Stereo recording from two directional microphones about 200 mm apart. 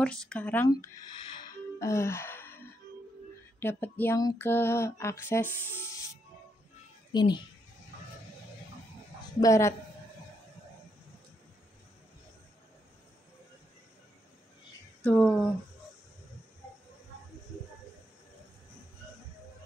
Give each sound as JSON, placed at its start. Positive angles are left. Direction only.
{"t": 0.0, "sound": "speech", "side_deg": 5}
{"t": 0.7, "sound": "gasp", "side_deg": 15}
{"t": 3.5, "sound": "a sound", "side_deg": 10}
{"t": 7.1, "sound": "a child's voice", "side_deg": 20}
{"t": 9.4, "sound": "a sound", "side_deg": 15}
{"t": 15.0, "sound": "speech", "side_deg": 0}